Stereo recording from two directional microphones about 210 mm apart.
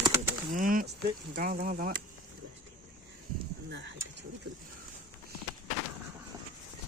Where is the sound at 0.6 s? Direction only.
40° right (ahead or behind).